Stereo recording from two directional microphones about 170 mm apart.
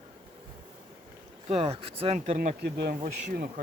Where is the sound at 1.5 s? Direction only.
35° right (ahead or behind).